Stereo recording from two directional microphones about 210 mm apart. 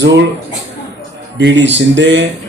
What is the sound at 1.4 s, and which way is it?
Speech, 55° right (ahead or behind).